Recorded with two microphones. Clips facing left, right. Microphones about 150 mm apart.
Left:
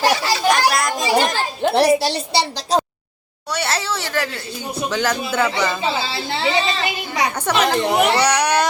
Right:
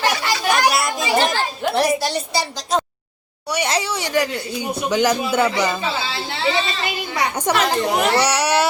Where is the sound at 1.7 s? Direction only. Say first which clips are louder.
Left 4 dB; 30° left (ahead or behind).